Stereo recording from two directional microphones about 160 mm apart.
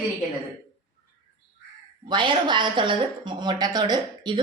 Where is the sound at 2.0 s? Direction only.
30° right (ahead or behind).